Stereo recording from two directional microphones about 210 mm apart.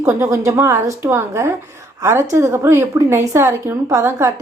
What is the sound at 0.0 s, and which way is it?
A woman's voice, 10° right (ahead or behind).